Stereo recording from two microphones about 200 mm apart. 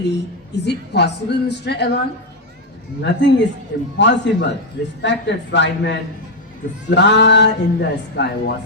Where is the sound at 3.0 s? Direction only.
60° left (ahead or behind).